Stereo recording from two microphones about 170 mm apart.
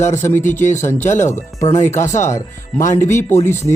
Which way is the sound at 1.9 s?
45° left (ahead or behind).